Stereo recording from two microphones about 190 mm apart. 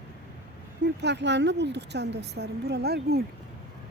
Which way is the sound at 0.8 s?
65° right (ahead or behind).